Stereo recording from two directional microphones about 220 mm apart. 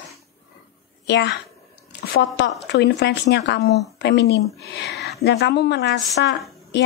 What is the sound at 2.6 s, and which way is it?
Speech, 50° left (ahead or behind).